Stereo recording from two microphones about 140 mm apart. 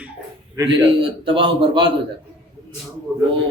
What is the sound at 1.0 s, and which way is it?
Speech, 40° right (ahead or behind).